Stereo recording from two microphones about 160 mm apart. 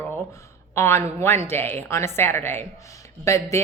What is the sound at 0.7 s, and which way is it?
A woman's voice, 15° left (ahead or behind).